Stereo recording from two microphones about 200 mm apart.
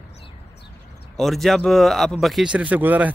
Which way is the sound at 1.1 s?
Centre (ahead or behind).